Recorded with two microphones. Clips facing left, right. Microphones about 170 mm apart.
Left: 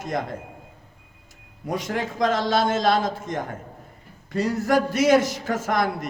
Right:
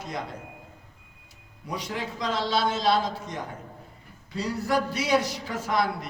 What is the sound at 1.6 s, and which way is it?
A man's voice, 45° left (ahead or behind).